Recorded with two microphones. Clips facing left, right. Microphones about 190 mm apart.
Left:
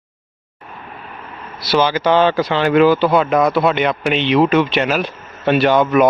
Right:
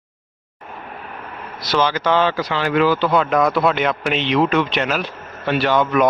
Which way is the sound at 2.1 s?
25° left (ahead or behind).